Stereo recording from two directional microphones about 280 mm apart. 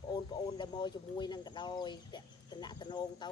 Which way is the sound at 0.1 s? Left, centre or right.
Centre.